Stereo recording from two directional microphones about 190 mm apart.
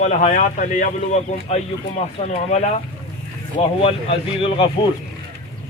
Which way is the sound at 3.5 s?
30° left (ahead or behind).